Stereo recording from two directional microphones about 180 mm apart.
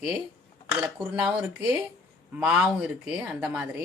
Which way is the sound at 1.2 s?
5° right (ahead or behind).